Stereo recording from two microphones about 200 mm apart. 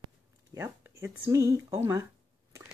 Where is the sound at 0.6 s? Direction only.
15° right (ahead or behind).